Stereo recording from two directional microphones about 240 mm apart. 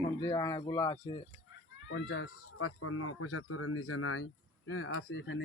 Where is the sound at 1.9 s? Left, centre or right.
Left.